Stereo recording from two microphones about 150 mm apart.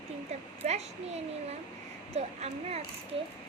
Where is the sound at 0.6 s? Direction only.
50° right (ahead or behind).